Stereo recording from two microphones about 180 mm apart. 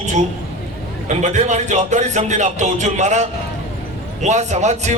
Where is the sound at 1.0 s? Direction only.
40° right (ahead or behind).